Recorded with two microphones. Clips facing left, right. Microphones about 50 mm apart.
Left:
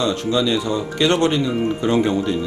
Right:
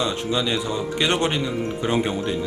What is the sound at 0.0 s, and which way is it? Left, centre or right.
Speech, centre.